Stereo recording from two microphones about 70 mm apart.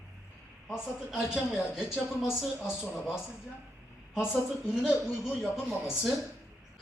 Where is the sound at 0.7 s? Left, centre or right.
Centre.